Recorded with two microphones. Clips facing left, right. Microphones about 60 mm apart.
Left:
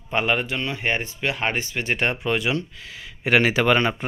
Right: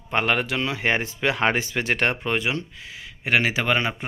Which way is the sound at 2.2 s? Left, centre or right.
Right.